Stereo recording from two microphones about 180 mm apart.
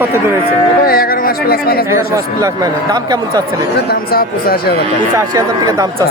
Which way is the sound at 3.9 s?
55° left (ahead or behind).